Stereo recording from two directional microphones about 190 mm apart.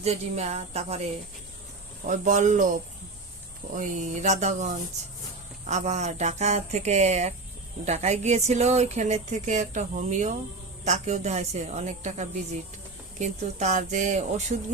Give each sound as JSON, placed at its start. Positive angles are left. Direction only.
{"t": 0.0, "sound": "speech", "side_deg": -35}
{"t": 2.0, "sound": "speech", "side_deg": -40}
{"t": 3.8, "sound": "speech", "side_deg": -40}